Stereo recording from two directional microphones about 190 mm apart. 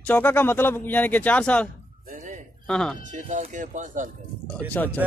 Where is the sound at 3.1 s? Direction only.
40° right (ahead or behind).